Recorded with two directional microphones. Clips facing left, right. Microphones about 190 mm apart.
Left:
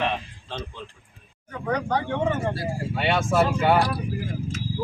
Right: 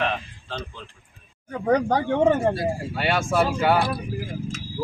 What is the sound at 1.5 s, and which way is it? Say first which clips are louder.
Speech: right 6 dB; 40° right (ahead or behind).